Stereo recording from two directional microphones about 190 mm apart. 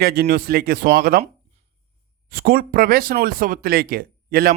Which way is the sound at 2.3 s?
50° right (ahead or behind).